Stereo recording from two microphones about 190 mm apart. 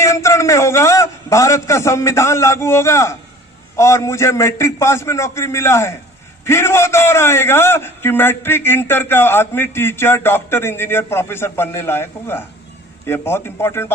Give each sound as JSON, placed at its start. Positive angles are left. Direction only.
{"t": 0.0, "sound": "a man's voice", "side_deg": 15}